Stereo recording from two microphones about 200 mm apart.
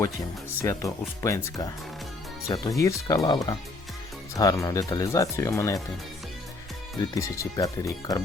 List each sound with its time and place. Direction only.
0.6 s speech: 15° left (ahead or behind)
7.2 s speech: 15° left (ahead or behind)